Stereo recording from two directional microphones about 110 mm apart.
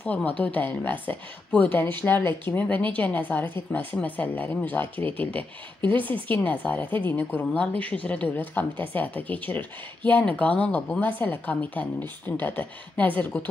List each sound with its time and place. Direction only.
0.0 s a woman's voice: 15° left (ahead or behind)
6.3 s a woman's voice: 15° left (ahead or behind)